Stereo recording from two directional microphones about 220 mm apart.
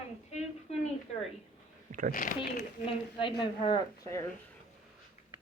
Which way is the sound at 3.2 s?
20° left (ahead or behind).